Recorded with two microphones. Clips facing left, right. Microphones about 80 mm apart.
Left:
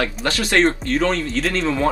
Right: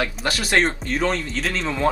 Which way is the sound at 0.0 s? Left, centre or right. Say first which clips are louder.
Left 2 dB; centre.